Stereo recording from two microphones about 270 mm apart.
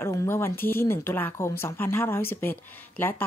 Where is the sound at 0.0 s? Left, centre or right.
Centre.